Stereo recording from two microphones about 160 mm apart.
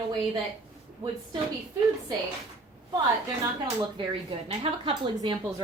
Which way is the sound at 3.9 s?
35° right (ahead or behind).